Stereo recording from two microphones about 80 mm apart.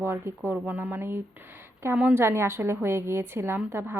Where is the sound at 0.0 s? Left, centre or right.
Right.